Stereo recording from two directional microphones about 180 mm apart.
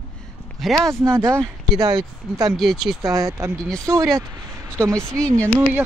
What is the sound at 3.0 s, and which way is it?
Speech, 20° right (ahead or behind).